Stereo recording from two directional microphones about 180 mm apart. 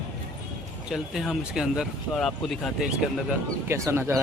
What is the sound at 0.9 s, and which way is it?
Speech, centre (ahead or behind).